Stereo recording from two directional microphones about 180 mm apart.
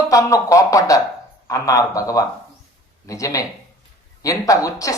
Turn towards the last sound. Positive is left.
turn(degrees=15)  # may be behind; listen again after turning